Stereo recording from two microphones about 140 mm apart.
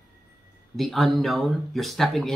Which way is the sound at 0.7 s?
Centre (ahead or behind).